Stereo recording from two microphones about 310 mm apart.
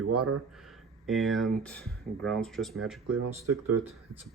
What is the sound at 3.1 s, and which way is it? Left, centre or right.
Speech, right.